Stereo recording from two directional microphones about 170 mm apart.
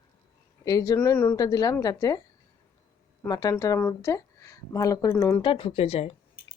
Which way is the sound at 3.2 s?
20° left (ahead or behind).